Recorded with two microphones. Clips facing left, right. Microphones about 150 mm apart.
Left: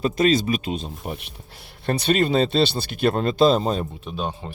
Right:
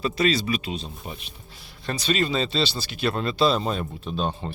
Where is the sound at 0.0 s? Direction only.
45° left (ahead or behind).